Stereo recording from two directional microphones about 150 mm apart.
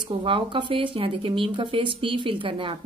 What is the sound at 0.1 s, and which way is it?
Speech, 35° right (ahead or behind).